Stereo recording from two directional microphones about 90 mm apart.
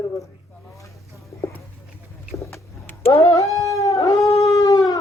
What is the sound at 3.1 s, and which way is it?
Cat, 40° left (ahead or behind).